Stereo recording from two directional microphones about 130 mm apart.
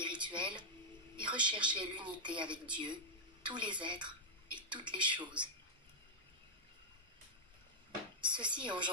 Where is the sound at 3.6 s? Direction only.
40° right (ahead or behind).